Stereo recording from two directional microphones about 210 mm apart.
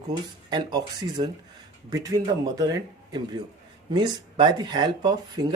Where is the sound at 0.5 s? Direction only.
20° right (ahead or behind).